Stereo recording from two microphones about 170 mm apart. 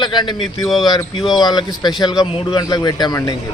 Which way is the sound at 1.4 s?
25° left (ahead or behind).